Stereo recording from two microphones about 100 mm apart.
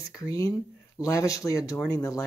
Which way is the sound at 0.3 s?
35° left (ahead or behind).